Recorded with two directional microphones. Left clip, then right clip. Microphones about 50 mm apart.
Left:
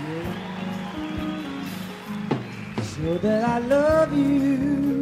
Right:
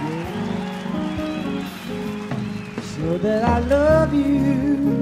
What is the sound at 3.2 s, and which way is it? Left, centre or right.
Music, left.